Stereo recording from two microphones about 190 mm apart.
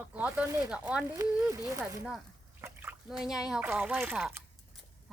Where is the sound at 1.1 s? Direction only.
15° right (ahead or behind).